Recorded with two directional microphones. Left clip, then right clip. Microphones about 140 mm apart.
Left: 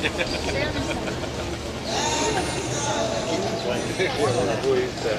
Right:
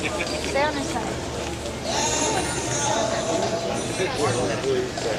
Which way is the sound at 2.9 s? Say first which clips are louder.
Right 2 dB; 15° right (ahead or behind).